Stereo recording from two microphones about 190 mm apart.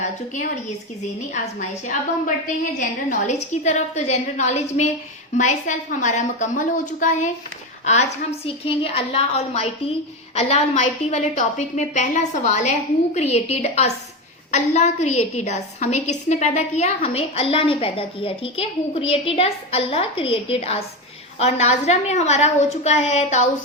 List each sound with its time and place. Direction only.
1.3 s a woman's voice: 40° left (ahead or behind)